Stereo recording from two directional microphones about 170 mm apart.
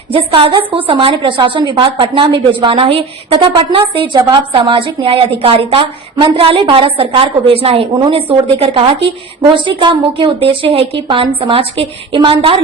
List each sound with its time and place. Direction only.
0.1 s a woman's voice: 30° right (ahead or behind)